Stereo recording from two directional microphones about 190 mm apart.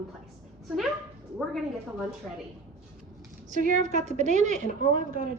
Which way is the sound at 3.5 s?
40° right (ahead or behind).